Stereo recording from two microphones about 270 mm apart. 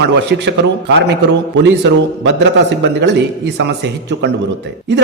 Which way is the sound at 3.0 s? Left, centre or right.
Right.